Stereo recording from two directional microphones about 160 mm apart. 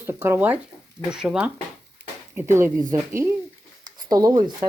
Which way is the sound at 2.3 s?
15° right (ahead or behind).